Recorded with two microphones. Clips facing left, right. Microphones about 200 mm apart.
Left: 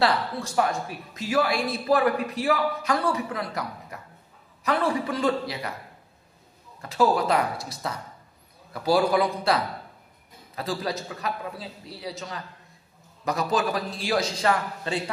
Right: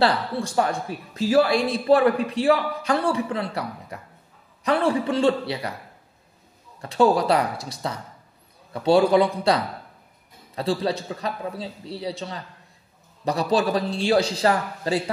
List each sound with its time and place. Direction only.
0.0 s speech: 30° right (ahead or behind)
6.8 s a man's voice: 35° right (ahead or behind)